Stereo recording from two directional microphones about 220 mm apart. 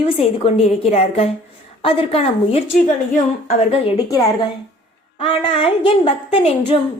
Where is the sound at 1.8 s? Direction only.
25° left (ahead or behind).